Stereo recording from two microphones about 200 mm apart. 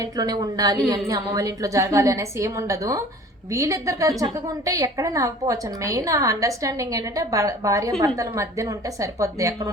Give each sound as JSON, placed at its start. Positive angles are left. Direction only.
{"t": 0.0, "sound": "a woman's voice", "side_deg": -20}